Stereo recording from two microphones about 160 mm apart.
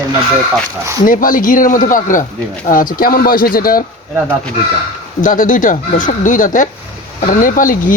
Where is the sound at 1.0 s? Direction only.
60° left (ahead or behind).